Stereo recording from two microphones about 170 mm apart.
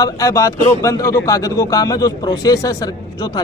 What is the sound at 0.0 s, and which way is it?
A man's voice, 20° left (ahead or behind).